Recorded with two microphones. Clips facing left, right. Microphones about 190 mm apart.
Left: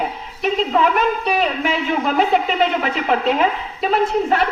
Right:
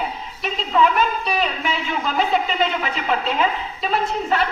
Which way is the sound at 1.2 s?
55° left (ahead or behind).